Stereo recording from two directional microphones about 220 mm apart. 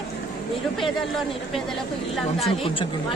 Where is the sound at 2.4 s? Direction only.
25° left (ahead or behind).